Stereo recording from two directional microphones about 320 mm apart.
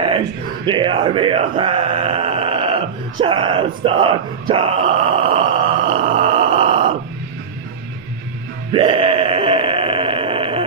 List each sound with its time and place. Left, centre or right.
0.7 s speech: centre
8.7 s sheep: centre